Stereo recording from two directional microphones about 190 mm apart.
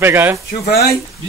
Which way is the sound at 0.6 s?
55° left (ahead or behind).